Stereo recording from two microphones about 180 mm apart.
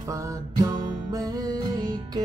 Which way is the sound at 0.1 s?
20° right (ahead or behind).